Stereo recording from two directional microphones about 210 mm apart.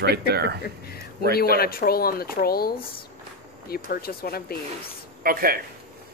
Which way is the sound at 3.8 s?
45° left (ahead or behind).